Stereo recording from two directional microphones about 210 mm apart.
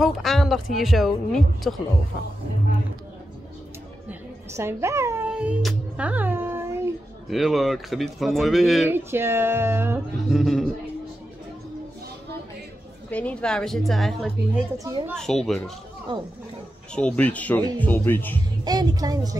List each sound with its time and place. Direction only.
0.0 s speech: centre (ahead or behind)
4.1 s music: 10° right (ahead or behind)
7.2 s speech: centre (ahead or behind)
9.1 s music: 10° right (ahead or behind)
10.3 s speech: centre (ahead or behind)
13.1 s speech: 5° left (ahead or behind)
14.8 s music: 15° right (ahead or behind)
15.1 s speech: centre (ahead or behind)
16.9 s speech: 5° left (ahead or behind)
18.6 s speech: 20° right (ahead or behind)